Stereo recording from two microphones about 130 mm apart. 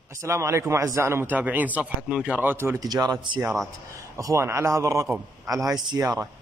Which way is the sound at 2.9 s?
30° right (ahead or behind).